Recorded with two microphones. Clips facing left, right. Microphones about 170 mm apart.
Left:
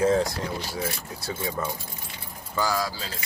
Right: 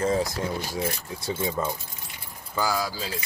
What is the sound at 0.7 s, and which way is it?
Speech, 20° right (ahead or behind).